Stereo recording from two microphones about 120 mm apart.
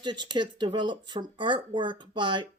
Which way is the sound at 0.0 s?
40° right (ahead or behind).